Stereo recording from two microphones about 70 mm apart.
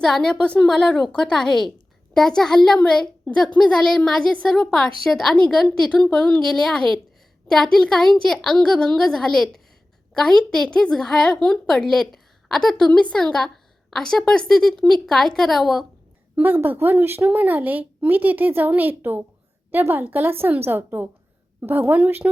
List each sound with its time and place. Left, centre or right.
0.0 s a child's voice: centre
16.3 s a woman's voice: right